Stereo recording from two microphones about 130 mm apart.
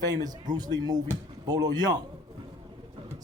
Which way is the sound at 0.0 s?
30° right (ahead or behind).